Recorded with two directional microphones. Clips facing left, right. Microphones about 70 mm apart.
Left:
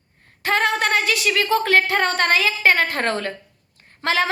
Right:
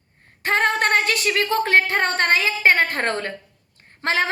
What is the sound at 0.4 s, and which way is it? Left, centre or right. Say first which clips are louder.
A woman's voice: even; right.